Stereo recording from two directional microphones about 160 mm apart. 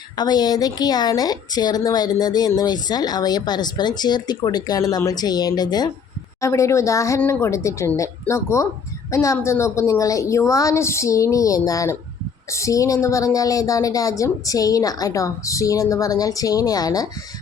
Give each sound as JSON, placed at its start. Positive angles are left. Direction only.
{"t": 0.2, "sound": "a woman's voice", "side_deg": 25}